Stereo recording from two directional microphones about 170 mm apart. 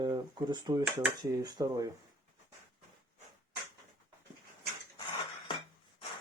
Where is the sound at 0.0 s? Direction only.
25° right (ahead or behind).